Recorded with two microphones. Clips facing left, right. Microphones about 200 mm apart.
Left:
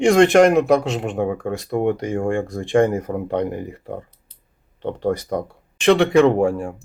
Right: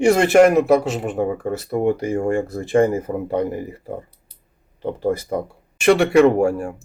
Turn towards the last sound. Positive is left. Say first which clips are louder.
# right 1 dB
turn(degrees=-5)  # may be behind; listen again after turning